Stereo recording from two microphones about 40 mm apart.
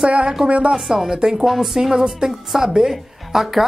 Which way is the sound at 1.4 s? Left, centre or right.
Centre.